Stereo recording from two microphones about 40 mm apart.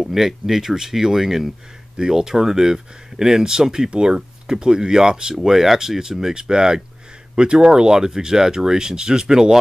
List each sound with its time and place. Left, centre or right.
0.0 s speech: centre